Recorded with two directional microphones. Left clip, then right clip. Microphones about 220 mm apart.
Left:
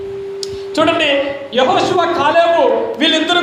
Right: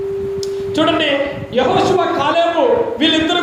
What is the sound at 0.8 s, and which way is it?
Speech, 20° left (ahead or behind).